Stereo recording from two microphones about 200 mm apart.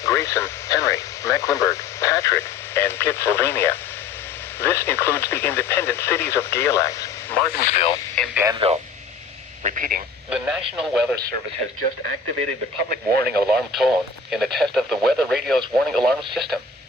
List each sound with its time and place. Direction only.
0.0 s speech: 15° left (ahead or behind)
7.6 s speech: 35° left (ahead or behind)
8.1 s speech: 5° left (ahead or behind)
8.5 s speech: 30° right (ahead or behind)
9.6 s speech: 45° right (ahead or behind)
10.2 s speech: 5° right (ahead or behind)
12.9 s speech: 50° right (ahead or behind)
13.7 s speech: centre (ahead or behind)